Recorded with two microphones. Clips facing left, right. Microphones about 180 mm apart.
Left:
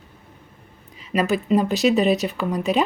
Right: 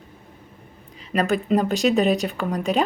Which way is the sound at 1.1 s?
5° left (ahead or behind).